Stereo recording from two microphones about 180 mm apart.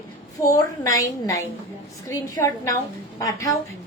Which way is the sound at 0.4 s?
20° left (ahead or behind).